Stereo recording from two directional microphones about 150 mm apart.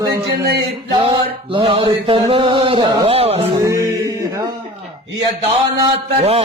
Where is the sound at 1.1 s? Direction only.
35° right (ahead or behind).